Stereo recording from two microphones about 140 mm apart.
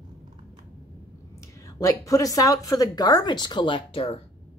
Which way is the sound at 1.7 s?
25° left (ahead or behind).